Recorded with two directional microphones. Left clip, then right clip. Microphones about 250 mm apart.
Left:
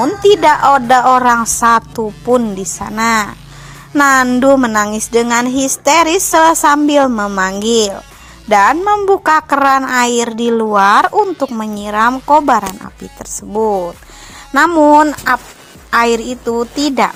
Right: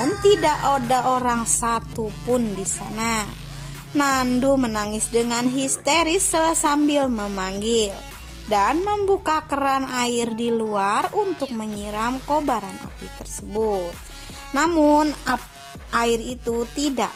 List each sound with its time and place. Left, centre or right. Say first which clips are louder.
0.0 s a woman's voice: left 9 dB; centre